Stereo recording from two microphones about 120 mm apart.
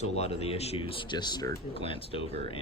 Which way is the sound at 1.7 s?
50° left (ahead or behind).